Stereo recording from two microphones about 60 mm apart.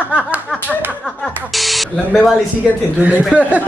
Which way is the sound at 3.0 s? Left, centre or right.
Right.